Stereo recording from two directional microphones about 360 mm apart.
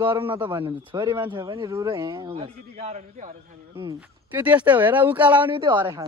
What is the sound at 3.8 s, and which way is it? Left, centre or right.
Speech, centre.